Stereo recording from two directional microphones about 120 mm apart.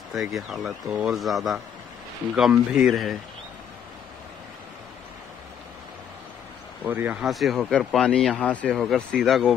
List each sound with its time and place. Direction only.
0.1 s speech: centre (ahead or behind)
6.8 s speech: 15° right (ahead or behind)
7.2 s speech: centre (ahead or behind)